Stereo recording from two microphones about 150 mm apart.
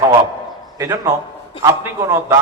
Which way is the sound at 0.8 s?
20° right (ahead or behind).